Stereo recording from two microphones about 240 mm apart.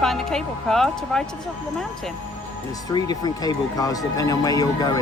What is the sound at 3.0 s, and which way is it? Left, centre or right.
Speech, centre.